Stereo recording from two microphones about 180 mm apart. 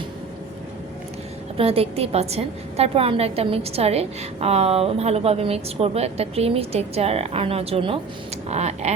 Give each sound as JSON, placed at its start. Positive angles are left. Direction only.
{"t": 1.5, "sound": "a woman's voice", "side_deg": -35}